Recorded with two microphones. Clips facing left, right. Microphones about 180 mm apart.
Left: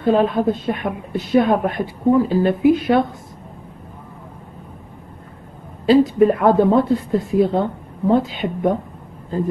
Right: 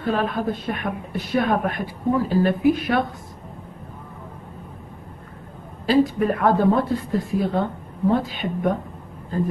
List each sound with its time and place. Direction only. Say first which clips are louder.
0.0 s a woman's voice: left 7 dB; 25° left (ahead or behind)
5.9 s a woman's voice: left 6 dB; 25° left (ahead or behind)